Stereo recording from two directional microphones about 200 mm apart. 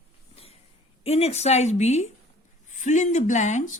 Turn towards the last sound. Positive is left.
turn(degrees=40)  # may be behind; listen again after turning